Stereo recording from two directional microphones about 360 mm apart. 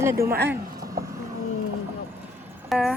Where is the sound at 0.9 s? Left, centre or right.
Centre.